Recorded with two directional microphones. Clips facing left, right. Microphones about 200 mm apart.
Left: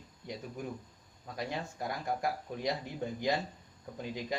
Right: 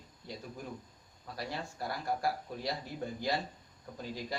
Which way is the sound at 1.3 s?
20° left (ahead or behind).